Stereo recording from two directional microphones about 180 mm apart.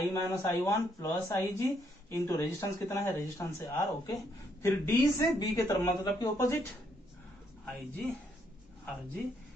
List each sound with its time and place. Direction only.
0.1 s speech: 15° left (ahead or behind)
7.6 s speech: centre (ahead or behind)